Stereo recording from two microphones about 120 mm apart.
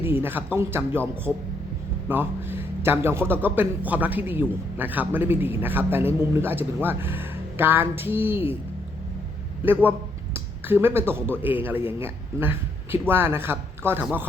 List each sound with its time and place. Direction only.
0.0 s a man's voice: 20° right (ahead or behind)
10.3 s a man's voice: 20° right (ahead or behind)